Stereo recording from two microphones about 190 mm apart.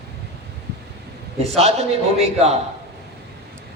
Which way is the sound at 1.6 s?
35° right (ahead or behind).